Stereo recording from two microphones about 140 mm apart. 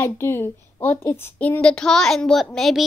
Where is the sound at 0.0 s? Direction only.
15° left (ahead or behind).